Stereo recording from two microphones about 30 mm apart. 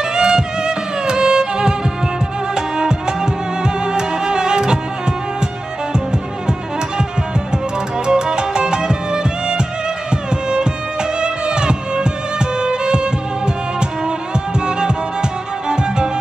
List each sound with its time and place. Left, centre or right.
0.1 s music: right
8.1 s music: right
11.1 s music: right